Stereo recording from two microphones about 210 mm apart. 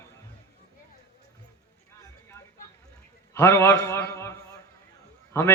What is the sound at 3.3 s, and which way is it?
A man's voice, 10° left (ahead or behind).